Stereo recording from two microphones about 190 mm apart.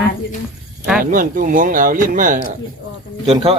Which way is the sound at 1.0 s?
45° right (ahead or behind).